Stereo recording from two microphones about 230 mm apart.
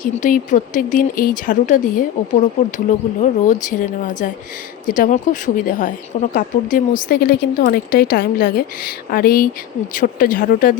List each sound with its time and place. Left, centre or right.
0.0 s speech: left